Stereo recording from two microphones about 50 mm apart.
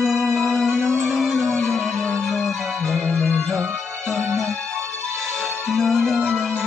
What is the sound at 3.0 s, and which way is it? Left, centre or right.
Music, left.